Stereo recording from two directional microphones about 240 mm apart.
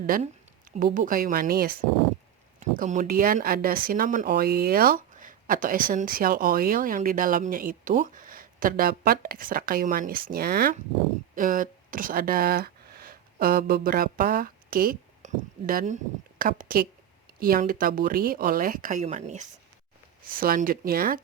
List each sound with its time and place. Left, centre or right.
0.0 s speech: right